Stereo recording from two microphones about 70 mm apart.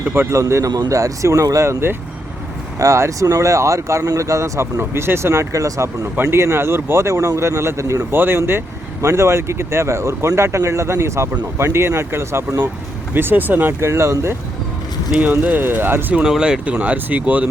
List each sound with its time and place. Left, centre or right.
0.0 s a man's voice: right
0.3 s speech: right
6.3 s speech: right
8.1 s speech: right
15.1 s speech: right
16.1 s speech: centre